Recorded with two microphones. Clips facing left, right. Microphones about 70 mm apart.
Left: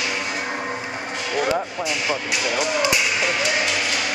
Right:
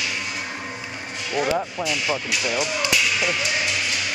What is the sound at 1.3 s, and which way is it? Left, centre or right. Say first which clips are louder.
Speech: even; centre.